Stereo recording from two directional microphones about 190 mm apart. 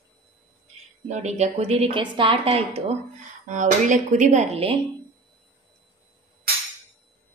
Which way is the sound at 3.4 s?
40° right (ahead or behind).